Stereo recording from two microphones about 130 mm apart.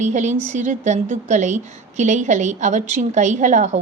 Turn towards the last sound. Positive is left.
turn(degrees=-70)  # may be behind; listen again after turning